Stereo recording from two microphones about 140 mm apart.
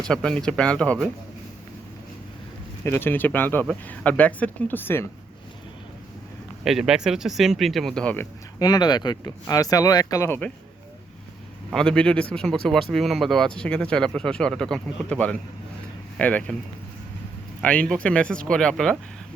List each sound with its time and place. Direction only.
0.0 s speech: 5° left (ahead or behind)
2.8 s speech: 15° left (ahead or behind)
6.7 s speech: 5° right (ahead or behind)
8.5 s speech: 30° left (ahead or behind)
11.7 s speech: 5° left (ahead or behind)
17.6 s speech: 10° left (ahead or behind)